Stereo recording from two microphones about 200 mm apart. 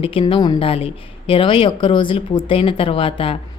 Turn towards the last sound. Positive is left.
turn(degrees=25)  # may be behind; listen again after turning